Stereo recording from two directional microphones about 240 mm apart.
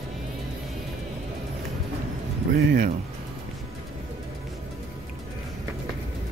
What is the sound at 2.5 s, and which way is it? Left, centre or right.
Speech, right.